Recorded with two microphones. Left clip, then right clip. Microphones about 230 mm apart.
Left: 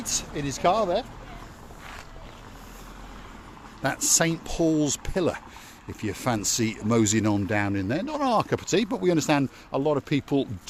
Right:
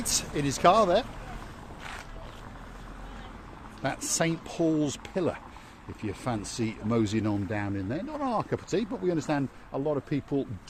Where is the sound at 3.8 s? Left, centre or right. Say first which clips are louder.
Left 5 dB; left.